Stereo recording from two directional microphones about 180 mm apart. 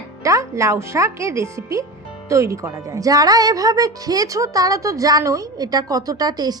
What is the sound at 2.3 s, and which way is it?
A woman's voice, 15° right (ahead or behind).